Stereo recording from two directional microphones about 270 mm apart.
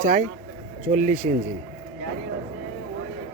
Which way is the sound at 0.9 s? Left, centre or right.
Right.